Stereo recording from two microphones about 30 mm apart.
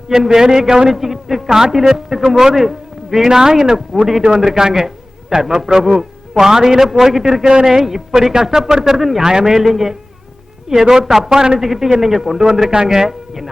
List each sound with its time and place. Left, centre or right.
0.1 s a man's voice: centre
5.6 s a man's voice: centre
11.3 s a man's voice: right
11.6 s a man's voice: centre